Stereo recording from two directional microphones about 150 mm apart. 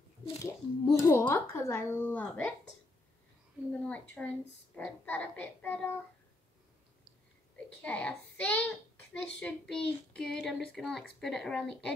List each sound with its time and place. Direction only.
0.4 s a child's voice: 20° left (ahead or behind)
3.8 s a child's voice: 10° left (ahead or behind)
7.8 s a child's voice: 10° left (ahead or behind)